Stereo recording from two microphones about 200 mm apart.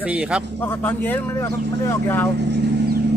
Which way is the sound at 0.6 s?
10° left (ahead or behind).